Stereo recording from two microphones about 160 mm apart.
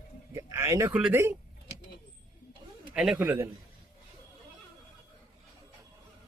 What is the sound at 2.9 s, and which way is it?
Speech, 5° right (ahead or behind).